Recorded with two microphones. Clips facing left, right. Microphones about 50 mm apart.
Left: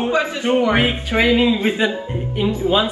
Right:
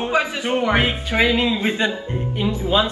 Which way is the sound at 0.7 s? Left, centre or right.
Centre.